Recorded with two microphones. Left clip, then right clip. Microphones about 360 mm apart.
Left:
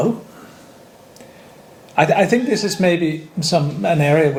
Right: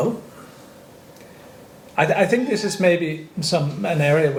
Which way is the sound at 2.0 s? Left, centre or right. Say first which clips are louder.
Left 3 dB; left.